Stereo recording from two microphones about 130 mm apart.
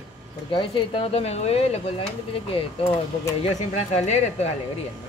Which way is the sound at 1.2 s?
55° left (ahead or behind).